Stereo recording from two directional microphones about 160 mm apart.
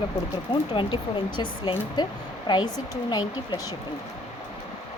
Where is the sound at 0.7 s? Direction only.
30° left (ahead or behind).